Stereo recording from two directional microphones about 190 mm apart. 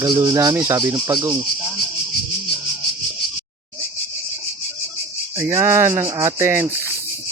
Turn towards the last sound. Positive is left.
turn(degrees=-15)  # may be behind; listen again after turning